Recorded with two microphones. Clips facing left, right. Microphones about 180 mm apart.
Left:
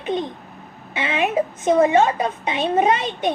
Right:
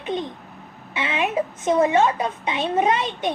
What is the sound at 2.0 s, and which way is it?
A woman's voice, 50° left (ahead or behind).